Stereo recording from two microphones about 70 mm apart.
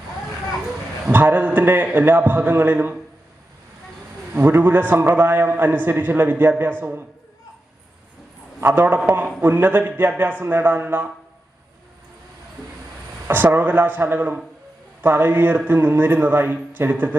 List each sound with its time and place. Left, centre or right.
1.1 s a man's voice: right
4.4 s a man's voice: right
8.6 s a man's voice: right
13.2 s a man's voice: right